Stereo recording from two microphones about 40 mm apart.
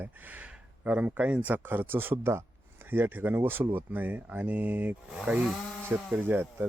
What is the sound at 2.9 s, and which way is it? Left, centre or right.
Speech, right.